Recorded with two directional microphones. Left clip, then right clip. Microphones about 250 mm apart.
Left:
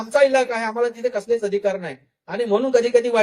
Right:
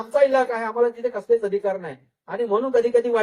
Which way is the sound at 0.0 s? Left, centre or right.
Left.